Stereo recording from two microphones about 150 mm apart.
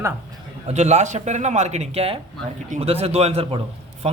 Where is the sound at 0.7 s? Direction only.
50° right (ahead or behind).